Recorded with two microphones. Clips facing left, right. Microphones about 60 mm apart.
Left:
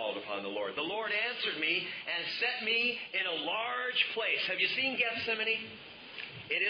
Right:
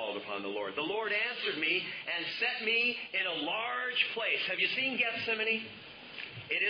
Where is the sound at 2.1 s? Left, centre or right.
Right.